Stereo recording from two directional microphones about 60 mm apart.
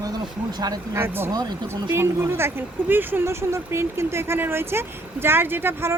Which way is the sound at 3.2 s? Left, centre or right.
Right.